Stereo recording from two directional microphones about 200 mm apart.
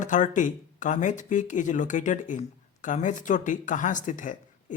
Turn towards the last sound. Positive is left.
turn(degrees=40)  # may be behind; listen again after turning